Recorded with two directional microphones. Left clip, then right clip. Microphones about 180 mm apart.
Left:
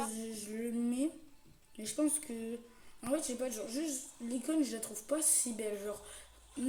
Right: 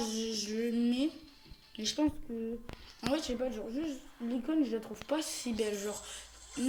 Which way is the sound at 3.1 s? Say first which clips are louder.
Even; centre (ahead or behind).